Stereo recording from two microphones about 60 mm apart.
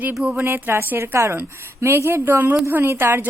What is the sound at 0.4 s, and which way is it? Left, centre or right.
A woman's voice, right.